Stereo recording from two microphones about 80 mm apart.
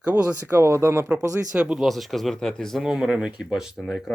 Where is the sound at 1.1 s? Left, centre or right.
Right.